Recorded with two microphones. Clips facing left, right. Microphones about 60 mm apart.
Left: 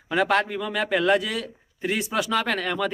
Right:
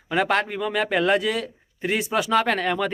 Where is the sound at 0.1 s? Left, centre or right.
Centre.